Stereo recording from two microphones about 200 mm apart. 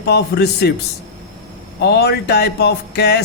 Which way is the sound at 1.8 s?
55° left (ahead or behind).